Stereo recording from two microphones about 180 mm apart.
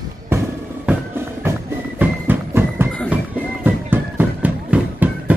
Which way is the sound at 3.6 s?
10° right (ahead or behind).